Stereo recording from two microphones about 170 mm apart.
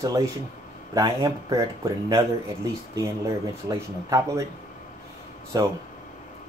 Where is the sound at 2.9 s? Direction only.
20° right (ahead or behind).